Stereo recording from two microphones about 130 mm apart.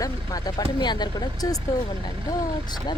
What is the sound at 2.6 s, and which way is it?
Speech, 35° left (ahead or behind).